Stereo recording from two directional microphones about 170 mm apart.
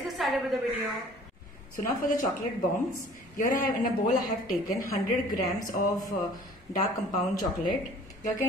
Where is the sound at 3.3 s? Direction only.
55° left (ahead or behind).